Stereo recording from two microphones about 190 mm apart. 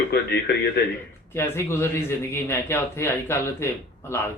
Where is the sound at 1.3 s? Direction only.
15° left (ahead or behind).